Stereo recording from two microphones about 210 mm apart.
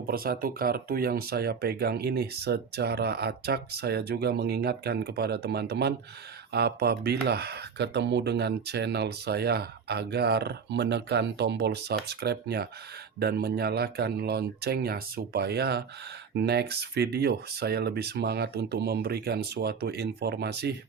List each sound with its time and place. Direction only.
0.1 s speech: 45° right (ahead or behind)